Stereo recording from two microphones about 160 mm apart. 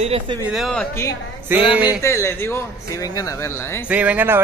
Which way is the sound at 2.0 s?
15° left (ahead or behind).